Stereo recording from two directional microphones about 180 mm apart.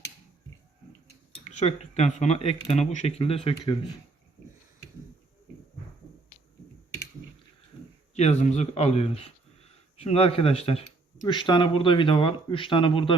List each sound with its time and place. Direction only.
1.5 s speech: 40° left (ahead or behind)
8.1 s speech: 40° left (ahead or behind)